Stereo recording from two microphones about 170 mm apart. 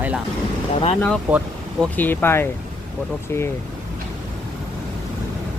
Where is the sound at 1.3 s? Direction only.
10° right (ahead or behind).